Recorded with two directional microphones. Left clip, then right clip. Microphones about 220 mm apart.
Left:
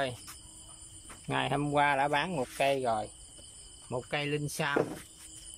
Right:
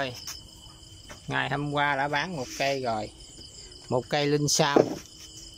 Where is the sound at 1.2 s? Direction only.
5° left (ahead or behind).